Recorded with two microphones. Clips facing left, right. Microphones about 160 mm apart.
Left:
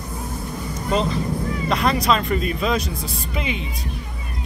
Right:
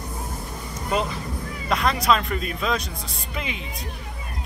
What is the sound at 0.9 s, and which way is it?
Speech, 10° right (ahead or behind).